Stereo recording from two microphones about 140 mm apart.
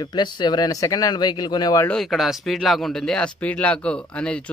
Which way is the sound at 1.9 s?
5° left (ahead or behind).